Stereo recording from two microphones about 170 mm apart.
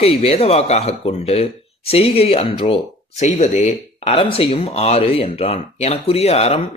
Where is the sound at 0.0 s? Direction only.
35° left (ahead or behind).